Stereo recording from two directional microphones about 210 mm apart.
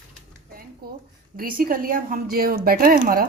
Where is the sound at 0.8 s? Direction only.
45° right (ahead or behind).